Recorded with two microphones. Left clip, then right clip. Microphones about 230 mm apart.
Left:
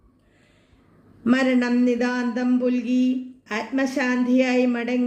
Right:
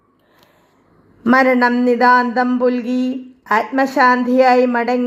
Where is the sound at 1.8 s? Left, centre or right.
Right.